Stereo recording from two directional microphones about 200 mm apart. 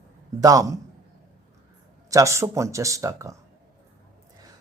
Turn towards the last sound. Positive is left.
turn(degrees=-15)  # may be behind; listen again after turning